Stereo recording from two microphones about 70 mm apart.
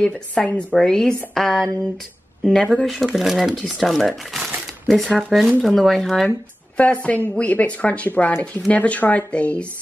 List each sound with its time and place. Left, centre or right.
0.0 s speech: centre
6.8 s speech: centre